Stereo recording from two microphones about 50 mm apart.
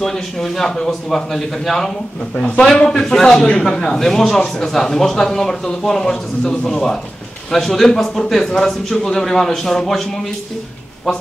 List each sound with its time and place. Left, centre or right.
0.0 s a man's voice: centre
2.3 s a man's voice: left